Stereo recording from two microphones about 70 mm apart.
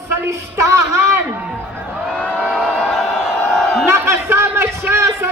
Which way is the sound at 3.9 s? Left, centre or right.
Right.